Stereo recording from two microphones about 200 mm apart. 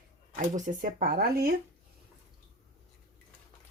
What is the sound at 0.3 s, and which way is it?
Speech, 40° right (ahead or behind).